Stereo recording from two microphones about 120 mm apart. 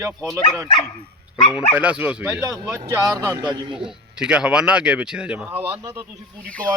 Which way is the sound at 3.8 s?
5° right (ahead or behind).